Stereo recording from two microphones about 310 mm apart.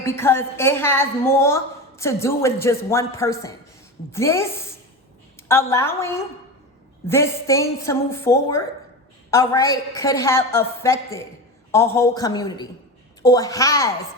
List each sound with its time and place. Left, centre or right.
0.0 s a woman's voice: centre